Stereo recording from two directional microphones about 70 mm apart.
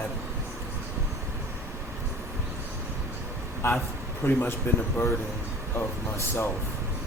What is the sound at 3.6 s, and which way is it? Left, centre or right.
Speech, left.